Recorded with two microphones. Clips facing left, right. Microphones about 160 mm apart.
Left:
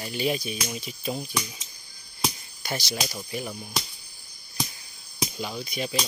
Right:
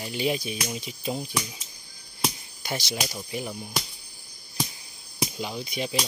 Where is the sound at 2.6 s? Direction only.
20° right (ahead or behind).